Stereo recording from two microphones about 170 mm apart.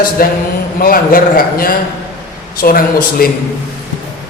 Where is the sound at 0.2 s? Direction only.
60° left (ahead or behind).